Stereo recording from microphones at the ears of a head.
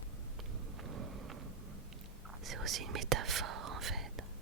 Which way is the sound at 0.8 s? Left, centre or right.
Right.